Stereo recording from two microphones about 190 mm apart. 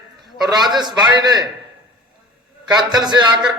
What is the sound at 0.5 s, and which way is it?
Speech, 20° right (ahead or behind).